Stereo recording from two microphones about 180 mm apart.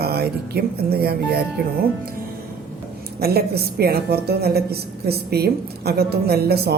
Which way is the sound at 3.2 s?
60° right (ahead or behind).